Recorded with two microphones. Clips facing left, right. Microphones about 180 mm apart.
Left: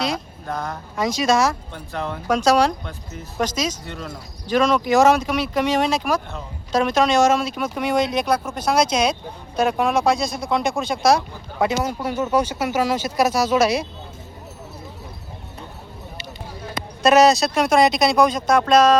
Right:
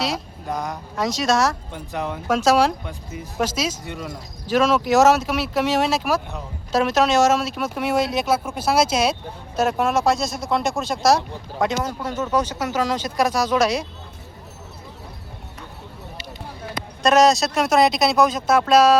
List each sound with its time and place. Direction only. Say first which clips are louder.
0.4 s speech: right 1 dB; 15° right (ahead or behind)
0.9 s speech: left 2 dB; centre (ahead or behind)
1.7 s speech: right 1 dB; 15° right (ahead or behind)
2.2 s speech: even; 5° right (ahead or behind)
17.0 s speech: left 2 dB; centre (ahead or behind)